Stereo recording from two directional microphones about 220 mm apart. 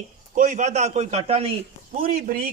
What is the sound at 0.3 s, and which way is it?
A man's voice, 35° right (ahead or behind).